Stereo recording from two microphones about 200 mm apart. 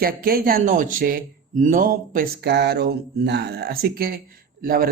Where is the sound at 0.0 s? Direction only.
50° right (ahead or behind).